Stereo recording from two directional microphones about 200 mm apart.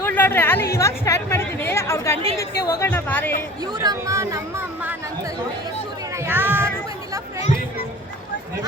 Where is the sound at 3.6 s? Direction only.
20° right (ahead or behind).